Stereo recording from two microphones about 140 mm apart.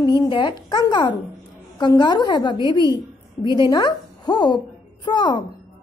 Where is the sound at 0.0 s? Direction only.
30° left (ahead or behind).